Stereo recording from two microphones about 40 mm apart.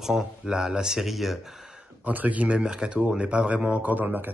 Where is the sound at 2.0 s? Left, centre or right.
Right.